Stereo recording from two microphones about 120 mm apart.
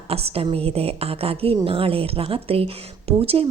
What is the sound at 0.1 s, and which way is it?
A woman's voice, 55° right (ahead or behind).